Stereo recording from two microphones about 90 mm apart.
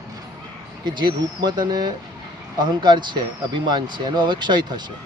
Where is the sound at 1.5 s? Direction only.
50° right (ahead or behind).